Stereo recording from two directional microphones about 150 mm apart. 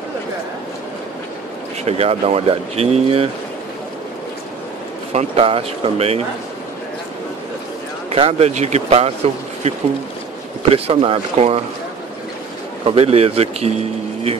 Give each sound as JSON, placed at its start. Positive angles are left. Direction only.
{"t": 1.9, "sound": "speech", "side_deg": -45}
{"t": 5.1, "sound": "speech", "side_deg": -40}
{"t": 8.1, "sound": "speech", "side_deg": -40}
{"t": 12.8, "sound": "speech", "side_deg": -40}